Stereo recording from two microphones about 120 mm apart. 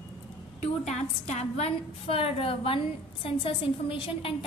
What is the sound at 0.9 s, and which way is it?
A woman's voice, 70° left (ahead or behind).